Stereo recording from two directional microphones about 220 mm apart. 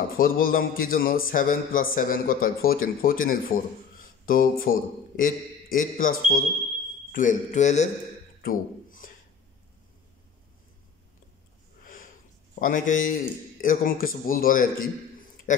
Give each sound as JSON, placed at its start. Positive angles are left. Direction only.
{"t": 0.2, "sound": "a man's voice", "side_deg": 40}
{"t": 8.4, "sound": "a sound", "side_deg": 40}
{"t": 11.8, "sound": "snort", "side_deg": 40}
{"t": 12.5, "sound": "a man's voice", "side_deg": 40}